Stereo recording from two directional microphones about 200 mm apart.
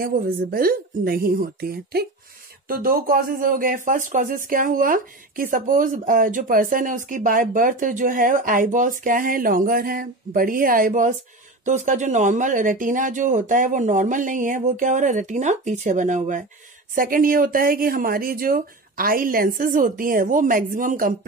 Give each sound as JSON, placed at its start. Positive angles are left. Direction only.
{"t": 0.0, "sound": "speech", "side_deg": -45}